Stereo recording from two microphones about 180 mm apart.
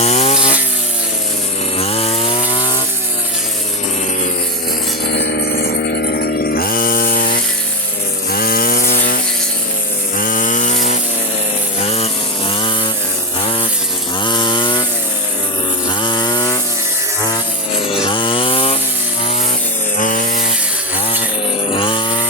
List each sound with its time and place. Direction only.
0.0 s wood: 35° left (ahead or behind)
1.8 s chainsaw: 35° left (ahead or behind)
5.1 s a sound: 60° left (ahead or behind)
8.3 s chainsaw: 55° left (ahead or behind); by 14.8 s 25° left (ahead or behind)
15.9 s chainsaw: 25° left (ahead or behind)
17.8 s chainsaw: 30° left (ahead or behind)
20.0 s wood: 45° left (ahead or behind)
21.7 s chainsaw: 30° left (ahead or behind)